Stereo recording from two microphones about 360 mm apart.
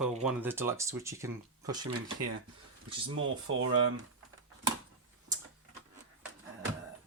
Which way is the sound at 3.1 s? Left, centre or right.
Right.